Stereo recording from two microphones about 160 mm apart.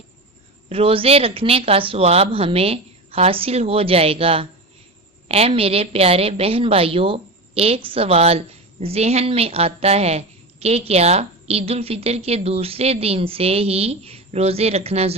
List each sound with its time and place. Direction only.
0.7 s a woman's voice: 35° right (ahead or behind)